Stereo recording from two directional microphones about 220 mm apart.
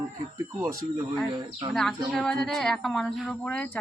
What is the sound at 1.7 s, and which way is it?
Speech, centre (ahead or behind).